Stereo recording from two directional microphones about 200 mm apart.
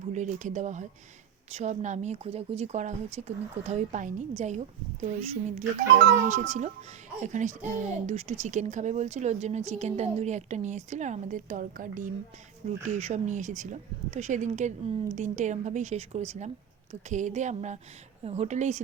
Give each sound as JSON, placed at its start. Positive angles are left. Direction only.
{"t": 0.1, "sound": "speech", "side_deg": -35}
{"t": 7.3, "sound": "speech", "side_deg": -35}